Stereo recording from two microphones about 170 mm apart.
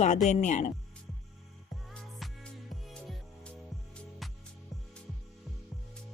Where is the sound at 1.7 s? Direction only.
Centre (ahead or behind).